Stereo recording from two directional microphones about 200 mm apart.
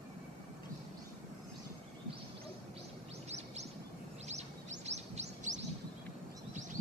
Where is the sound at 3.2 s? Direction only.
35° right (ahead or behind).